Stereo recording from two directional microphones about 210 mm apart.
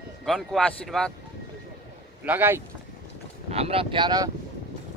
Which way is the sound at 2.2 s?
10° right (ahead or behind).